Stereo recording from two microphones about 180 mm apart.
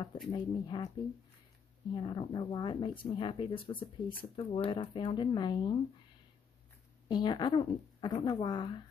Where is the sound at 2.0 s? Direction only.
25° left (ahead or behind).